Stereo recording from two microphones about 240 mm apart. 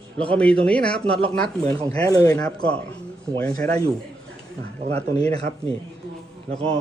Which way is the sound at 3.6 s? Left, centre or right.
Centre.